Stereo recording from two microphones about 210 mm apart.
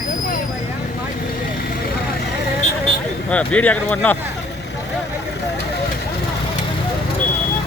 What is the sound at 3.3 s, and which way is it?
Speech, 5° left (ahead or behind).